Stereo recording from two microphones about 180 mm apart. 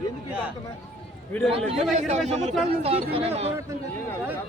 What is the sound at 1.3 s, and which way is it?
Speech, centre (ahead or behind).